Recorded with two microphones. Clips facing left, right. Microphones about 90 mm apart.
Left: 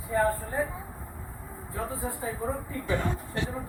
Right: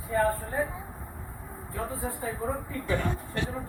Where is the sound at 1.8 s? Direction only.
20° left (ahead or behind).